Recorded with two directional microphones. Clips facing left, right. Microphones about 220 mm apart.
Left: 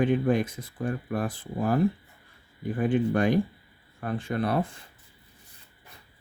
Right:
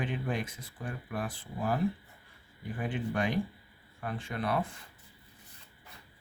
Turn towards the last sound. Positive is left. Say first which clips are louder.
# left 6 dB
turn(degrees=40)  # may be behind; listen again after turning